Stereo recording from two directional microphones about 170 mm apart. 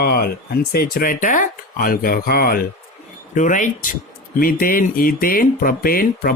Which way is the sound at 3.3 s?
50° left (ahead or behind).